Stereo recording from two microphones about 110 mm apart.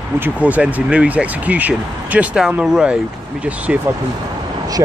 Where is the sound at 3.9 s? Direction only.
20° right (ahead or behind).